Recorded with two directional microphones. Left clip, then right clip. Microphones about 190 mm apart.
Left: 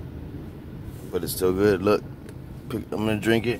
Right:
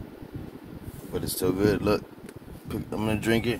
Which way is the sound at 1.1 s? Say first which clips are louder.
Left 4 dB; 45° left (ahead or behind).